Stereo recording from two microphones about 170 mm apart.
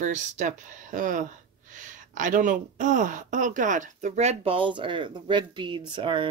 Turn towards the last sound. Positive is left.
turn(degrees=-30)  # may be behind; listen again after turning